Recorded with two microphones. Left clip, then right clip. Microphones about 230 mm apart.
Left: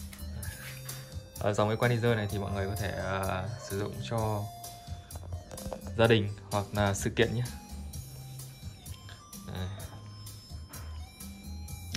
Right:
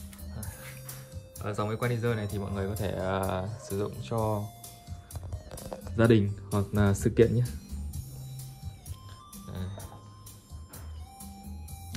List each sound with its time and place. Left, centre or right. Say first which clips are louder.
1.4 s speech: left 4 dB; centre
4.1 s speech: right 2 dB; centre
5.5 s speech: even; centre